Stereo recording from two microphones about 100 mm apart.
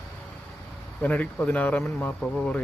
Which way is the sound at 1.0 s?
15° left (ahead or behind).